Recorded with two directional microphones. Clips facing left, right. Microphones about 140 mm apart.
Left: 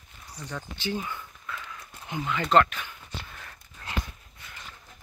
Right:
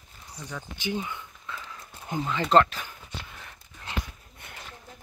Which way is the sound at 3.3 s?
20° right (ahead or behind).